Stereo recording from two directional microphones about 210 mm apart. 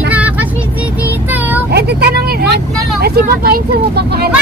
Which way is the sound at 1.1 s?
10° right (ahead or behind).